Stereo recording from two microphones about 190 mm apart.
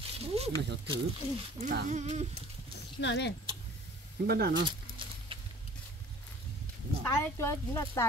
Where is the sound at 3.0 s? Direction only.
65° left (ahead or behind).